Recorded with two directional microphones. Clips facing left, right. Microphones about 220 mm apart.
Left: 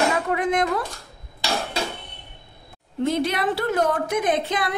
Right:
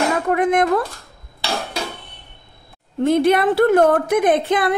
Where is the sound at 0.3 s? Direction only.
55° right (ahead or behind).